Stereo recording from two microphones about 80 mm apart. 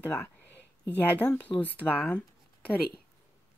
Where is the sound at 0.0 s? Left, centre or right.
Left.